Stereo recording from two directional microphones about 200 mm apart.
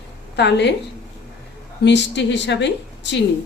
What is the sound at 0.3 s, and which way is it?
Speech, 60° left (ahead or behind).